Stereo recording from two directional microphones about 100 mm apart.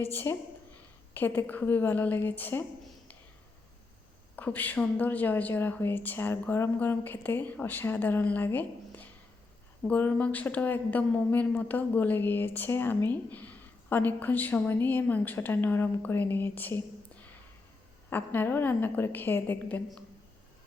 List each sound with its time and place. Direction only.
0.0 s speech: 25° left (ahead or behind)
4.4 s a woman's voice: 15° left (ahead or behind)